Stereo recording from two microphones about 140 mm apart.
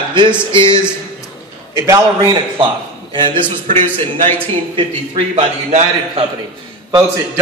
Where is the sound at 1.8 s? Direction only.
20° right (ahead or behind); by 3.5 s 35° right (ahead or behind).